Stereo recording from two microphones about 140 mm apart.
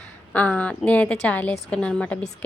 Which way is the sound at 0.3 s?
10° left (ahead or behind).